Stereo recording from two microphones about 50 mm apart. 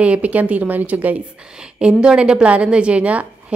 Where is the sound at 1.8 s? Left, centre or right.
Centre.